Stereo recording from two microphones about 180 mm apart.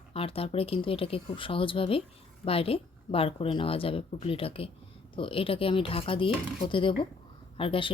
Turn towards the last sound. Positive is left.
turn(degrees=30)  # may be behind; listen again after turning